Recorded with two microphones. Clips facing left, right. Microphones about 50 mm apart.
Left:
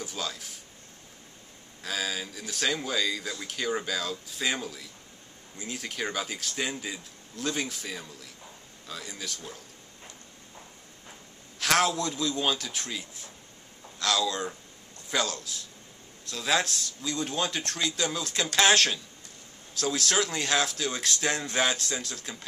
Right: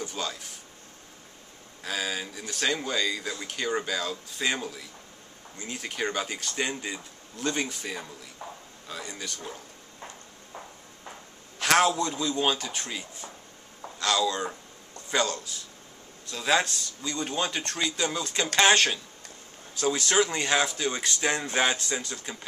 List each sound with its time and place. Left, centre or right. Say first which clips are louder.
0.0 s a sound: right 2 dB; centre
1.8 s speech: right 1 dB; centre
9.0 s speech: right 1 dB; centre
11.6 s a man's voice: right 3 dB; centre